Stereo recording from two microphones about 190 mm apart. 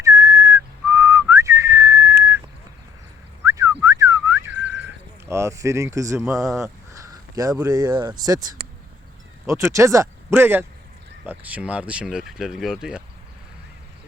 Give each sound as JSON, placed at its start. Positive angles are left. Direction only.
{"t": 0.0, "sound": "whistling", "side_deg": -15}
{"t": 3.4, "sound": "whistling", "side_deg": -15}
{"t": 6.3, "sound": "speech", "side_deg": 0}
{"t": 6.6, "sound": "speech", "side_deg": -20}